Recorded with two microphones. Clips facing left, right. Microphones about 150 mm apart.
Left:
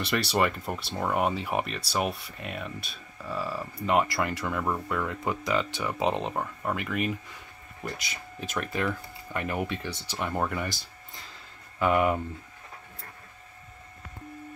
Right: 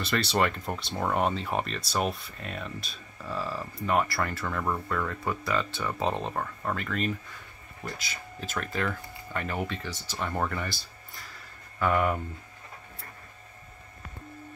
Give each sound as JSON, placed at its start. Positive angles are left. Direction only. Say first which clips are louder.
{"t": 0.0, "sound": "speech", "louder": "left 1 dB", "side_deg": 10}
{"t": 3.8, "sound": "speech", "louder": "left 2 dB", "side_deg": 15}
{"t": 8.4, "sound": "speech", "louder": "left 1 dB", "side_deg": 10}